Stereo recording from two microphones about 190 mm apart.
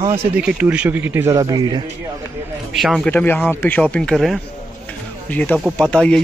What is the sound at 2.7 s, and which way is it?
Speech, centre (ahead or behind).